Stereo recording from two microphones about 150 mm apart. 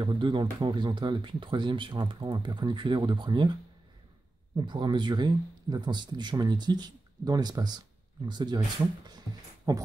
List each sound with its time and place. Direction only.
0.0 s speech: 35° right (ahead or behind)
4.6 s speech: 30° right (ahead or behind)